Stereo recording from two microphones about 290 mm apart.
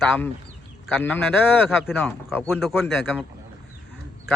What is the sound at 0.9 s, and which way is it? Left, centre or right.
A man's voice, centre.